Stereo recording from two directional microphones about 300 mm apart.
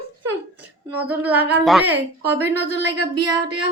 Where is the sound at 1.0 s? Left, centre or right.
Centre.